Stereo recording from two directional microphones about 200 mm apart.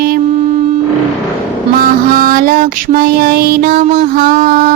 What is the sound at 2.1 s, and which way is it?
Music, 45° right (ahead or behind).